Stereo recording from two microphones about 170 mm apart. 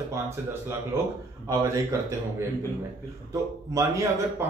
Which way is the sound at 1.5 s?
15° right (ahead or behind).